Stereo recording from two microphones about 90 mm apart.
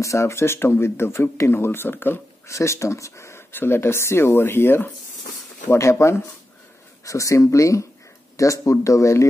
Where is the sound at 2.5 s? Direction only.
35° left (ahead or behind).